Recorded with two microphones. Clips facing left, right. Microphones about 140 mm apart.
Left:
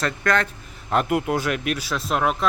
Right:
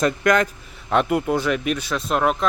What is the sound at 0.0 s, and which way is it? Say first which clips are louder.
Speech: right 4 dB; 15° right (ahead or behind).